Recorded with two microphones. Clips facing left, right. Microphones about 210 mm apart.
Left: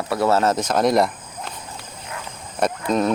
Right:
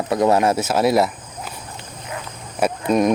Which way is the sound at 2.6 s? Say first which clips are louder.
Right 3 dB; 10° right (ahead or behind).